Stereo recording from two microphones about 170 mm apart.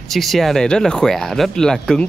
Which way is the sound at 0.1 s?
Centre (ahead or behind).